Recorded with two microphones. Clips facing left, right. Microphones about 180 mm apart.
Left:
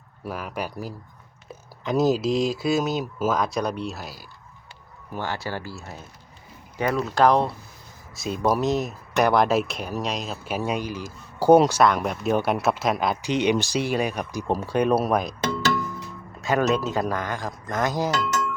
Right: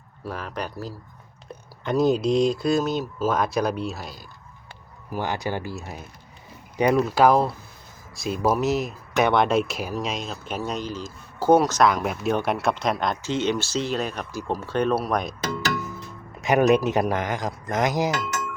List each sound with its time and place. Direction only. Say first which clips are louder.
0.3 s speech: left 1 dB; 5° left (ahead or behind)
5.1 s speech: right 3 dB; 15° right (ahead or behind)
7.1 s speech: right 1 dB; 5° right (ahead or behind); by 11.8 s 15° left (ahead or behind)
12.0 s speech: left 1 dB; centre (ahead or behind)
13.2 s speech: left 4 dB; 15° left (ahead or behind)
15.1 s speech: left 2 dB; centre (ahead or behind)
16.4 s speech: right 4 dB; 15° right (ahead or behind)